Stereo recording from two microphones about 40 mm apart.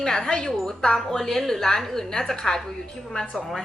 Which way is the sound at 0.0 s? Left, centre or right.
Centre.